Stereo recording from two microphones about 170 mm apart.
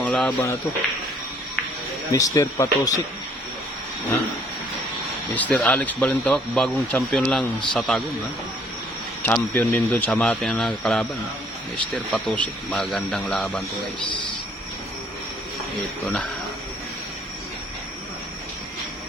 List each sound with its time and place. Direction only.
0.0 s speech: 10° left (ahead or behind)
2.1 s speech: 20° left (ahead or behind)
5.3 s speech: 10° left (ahead or behind)
9.2 s speech: 10° left (ahead or behind)
12.1 s speech: 5° left (ahead or behind)